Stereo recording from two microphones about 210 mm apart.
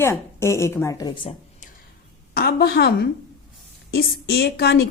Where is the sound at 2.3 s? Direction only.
50° left (ahead or behind).